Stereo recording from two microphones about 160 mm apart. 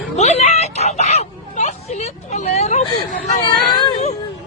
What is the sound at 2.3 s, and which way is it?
Speech, 45° left (ahead or behind).